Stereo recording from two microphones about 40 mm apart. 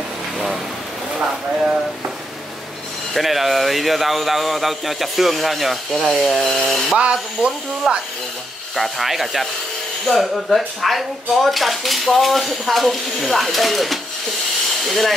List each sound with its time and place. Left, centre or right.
3.2 s speech: centre
7.0 s speech: right
7.8 s speech: centre